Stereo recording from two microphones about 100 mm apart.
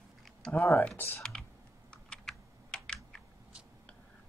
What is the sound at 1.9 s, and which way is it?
Computer keyboard, 5° left (ahead or behind).